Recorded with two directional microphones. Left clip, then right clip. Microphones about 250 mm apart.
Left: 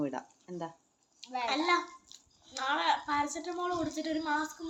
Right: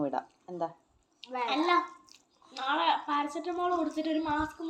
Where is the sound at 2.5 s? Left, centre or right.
Left.